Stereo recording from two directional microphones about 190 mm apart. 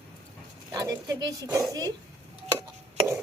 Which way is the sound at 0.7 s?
20° right (ahead or behind).